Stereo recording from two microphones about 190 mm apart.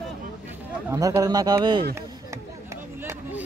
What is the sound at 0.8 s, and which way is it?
A man's voice, 15° right (ahead or behind).